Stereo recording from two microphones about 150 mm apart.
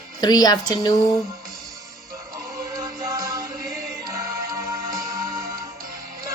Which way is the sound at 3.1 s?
25° right (ahead or behind).